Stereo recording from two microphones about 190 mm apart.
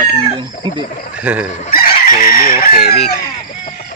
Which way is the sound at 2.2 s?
50° left (ahead or behind).